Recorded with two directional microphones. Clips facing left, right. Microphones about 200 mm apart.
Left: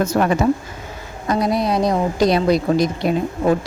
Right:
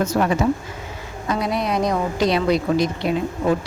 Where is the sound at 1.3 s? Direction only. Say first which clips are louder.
Left 4 dB; 40° left (ahead or behind).